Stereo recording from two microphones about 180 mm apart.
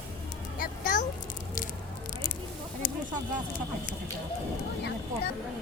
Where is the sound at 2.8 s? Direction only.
55° left (ahead or behind).